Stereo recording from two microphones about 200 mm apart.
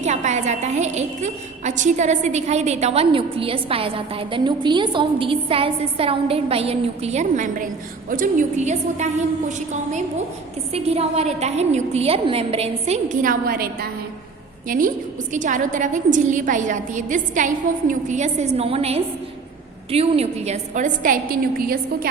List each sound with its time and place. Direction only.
0.0 s a woman's voice: 35° right (ahead or behind)
13.5 s a woman's voice: 50° right (ahead or behind)